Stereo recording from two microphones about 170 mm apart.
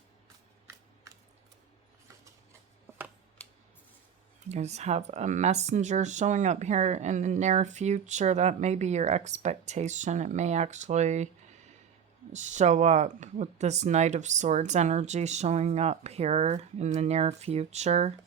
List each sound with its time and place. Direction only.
4.4 s speech: 40° right (ahead or behind)
12.3 s speech: 45° right (ahead or behind)